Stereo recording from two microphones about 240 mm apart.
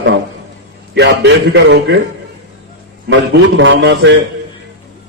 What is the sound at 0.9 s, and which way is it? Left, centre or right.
Speech, right.